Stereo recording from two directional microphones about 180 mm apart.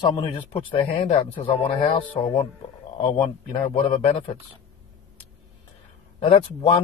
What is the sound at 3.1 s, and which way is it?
Speech, 25° left (ahead or behind).